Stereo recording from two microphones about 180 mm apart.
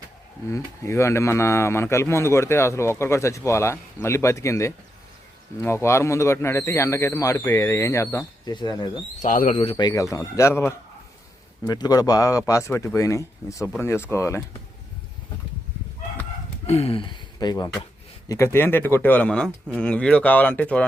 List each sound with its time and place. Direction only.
0.5 s speech: 15° left (ahead or behind)
9.2 s speech: 45° left (ahead or behind)
9.6 s speech: 30° left (ahead or behind)
16.6 s speech: 35° left (ahead or behind); by 19.5 s 5° left (ahead or behind)
19.5 s speech: 5° right (ahead or behind)
19.8 s speech: 5° left (ahead or behind)